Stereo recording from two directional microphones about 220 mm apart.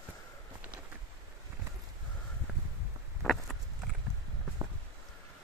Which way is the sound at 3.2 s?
Centre (ahead or behind).